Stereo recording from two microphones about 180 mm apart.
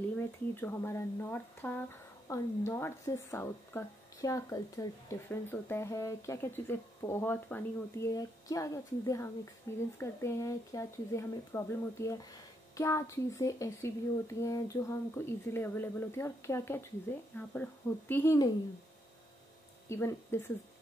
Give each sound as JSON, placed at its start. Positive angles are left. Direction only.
{"t": 0.2, "sound": "speech", "side_deg": 15}
{"t": 19.9, "sound": "speech", "side_deg": 15}